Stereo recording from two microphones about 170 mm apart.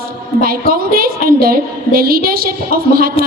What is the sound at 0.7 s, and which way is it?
A woman's voice, 60° right (ahead or behind).